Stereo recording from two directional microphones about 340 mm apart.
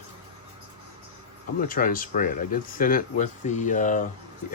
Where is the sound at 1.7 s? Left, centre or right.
Left.